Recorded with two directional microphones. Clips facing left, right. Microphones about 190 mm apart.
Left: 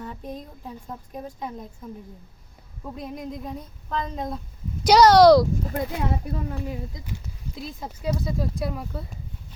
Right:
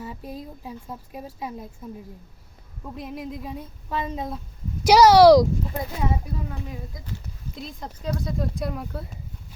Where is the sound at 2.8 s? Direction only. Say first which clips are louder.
Even; centre (ahead or behind).